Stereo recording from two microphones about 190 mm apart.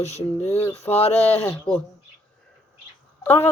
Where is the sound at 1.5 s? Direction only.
5° left (ahead or behind).